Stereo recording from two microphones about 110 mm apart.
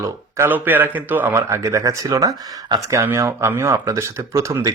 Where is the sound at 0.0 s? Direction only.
20° right (ahead or behind); by 2.8 s 35° right (ahead or behind).